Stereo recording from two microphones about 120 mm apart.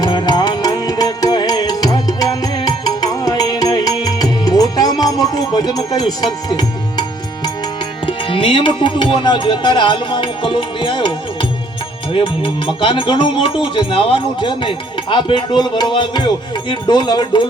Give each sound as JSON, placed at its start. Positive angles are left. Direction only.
{"t": 0.0, "sound": "music", "side_deg": 35}
{"t": 8.0, "sound": "music", "side_deg": 45}
{"t": 15.1, "sound": "speech", "side_deg": 40}